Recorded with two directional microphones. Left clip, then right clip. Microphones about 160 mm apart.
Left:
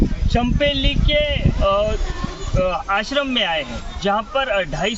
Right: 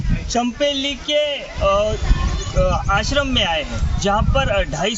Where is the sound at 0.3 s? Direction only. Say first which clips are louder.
Even; 5° left (ahead or behind).